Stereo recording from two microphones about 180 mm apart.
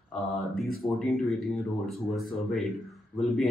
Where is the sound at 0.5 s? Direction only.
Centre (ahead or behind).